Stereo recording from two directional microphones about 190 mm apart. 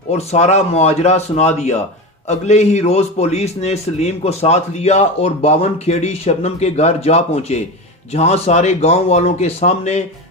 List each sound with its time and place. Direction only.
0.1 s a man's voice: 35° left (ahead or behind)